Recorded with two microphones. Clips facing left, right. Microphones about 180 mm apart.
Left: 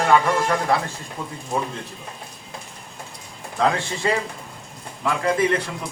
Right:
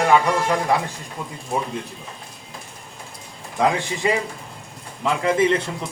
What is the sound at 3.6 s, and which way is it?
A man's voice, 15° right (ahead or behind).